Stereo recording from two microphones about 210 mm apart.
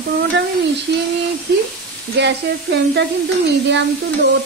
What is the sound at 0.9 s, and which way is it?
Speech, 55° right (ahead or behind).